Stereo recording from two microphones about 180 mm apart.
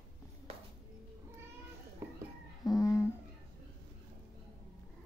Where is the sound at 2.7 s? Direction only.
20° left (ahead or behind).